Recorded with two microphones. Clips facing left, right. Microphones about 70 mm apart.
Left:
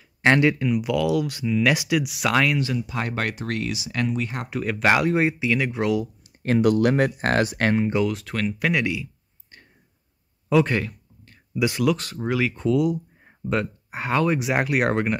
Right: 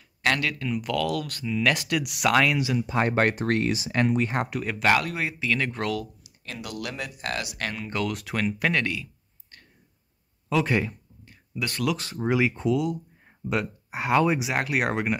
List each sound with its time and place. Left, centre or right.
0.2 s speech: left
0.7 s speech: centre
2.9 s speech: right
4.5 s speech: centre
4.8 s speech: centre
6.2 s speech: left
7.9 s speech: centre
8.7 s a sound: centre
10.5 s speech: centre
10.8 s a sound: centre
11.5 s speech: centre
12.3 s speech: centre
12.6 s speech: centre
14.4 s speech: centre